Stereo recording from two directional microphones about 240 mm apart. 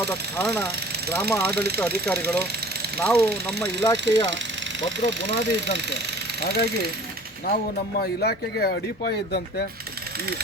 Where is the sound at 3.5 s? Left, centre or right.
Right.